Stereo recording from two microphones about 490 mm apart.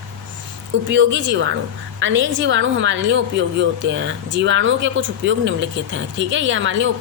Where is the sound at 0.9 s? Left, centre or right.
Right.